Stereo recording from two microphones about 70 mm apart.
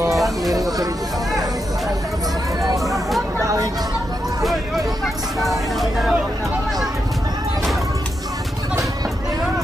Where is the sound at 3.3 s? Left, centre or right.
Right.